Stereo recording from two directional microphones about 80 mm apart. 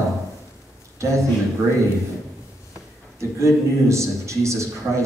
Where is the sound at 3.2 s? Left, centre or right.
Right.